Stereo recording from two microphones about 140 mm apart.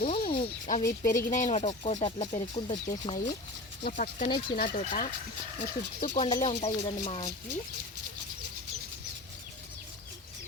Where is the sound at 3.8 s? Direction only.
80° left.